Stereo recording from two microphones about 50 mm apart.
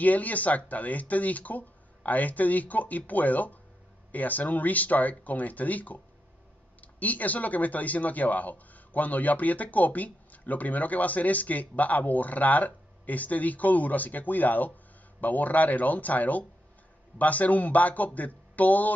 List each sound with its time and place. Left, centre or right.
0.0 s speech: left